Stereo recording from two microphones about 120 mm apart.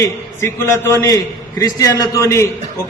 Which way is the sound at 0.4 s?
20° left (ahead or behind).